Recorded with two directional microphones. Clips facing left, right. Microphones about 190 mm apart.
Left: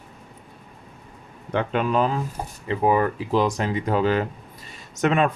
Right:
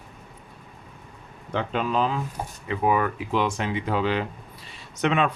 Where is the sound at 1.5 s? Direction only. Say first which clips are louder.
Left 3 dB; 55° left (ahead or behind).